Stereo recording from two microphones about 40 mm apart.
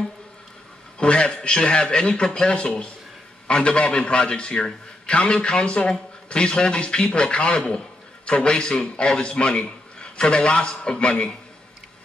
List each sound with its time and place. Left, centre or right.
0.9 s a man's voice: left